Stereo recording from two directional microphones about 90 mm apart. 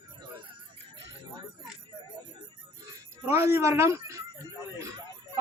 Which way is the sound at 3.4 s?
30° right (ahead or behind).